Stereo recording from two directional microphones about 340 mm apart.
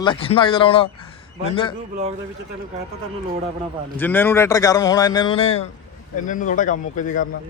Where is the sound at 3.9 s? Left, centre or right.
Centre; by 7.3 s left.